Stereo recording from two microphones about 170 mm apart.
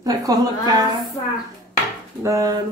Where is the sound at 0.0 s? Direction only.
20° right (ahead or behind).